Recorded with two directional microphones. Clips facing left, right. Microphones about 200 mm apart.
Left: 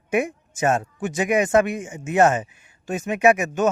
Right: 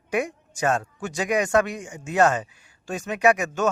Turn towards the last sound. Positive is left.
turn(degrees=20)  # may be behind; listen again after turning